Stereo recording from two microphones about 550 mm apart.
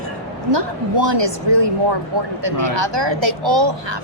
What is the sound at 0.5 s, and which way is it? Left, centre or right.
A woman's voice, right.